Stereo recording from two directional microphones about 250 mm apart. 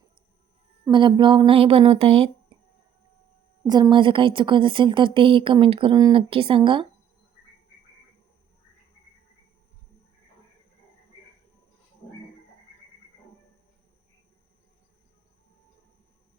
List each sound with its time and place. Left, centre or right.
0.9 s a woman's voice: centre
3.7 s a woman's voice: centre